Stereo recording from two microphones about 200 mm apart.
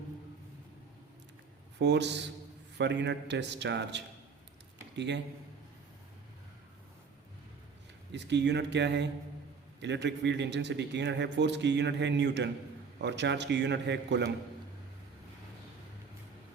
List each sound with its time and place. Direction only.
1.8 s a man's voice: 60° right (ahead or behind)
8.1 s a man's voice: 60° right (ahead or behind)